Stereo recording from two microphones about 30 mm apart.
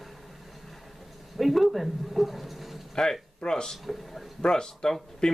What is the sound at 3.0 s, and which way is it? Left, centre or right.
Speech, left.